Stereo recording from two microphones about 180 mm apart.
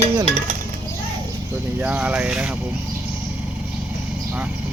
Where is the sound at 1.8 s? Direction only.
10° right (ahead or behind).